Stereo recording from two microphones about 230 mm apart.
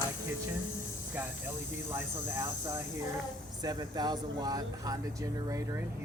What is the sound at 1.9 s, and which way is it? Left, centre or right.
Speech, centre.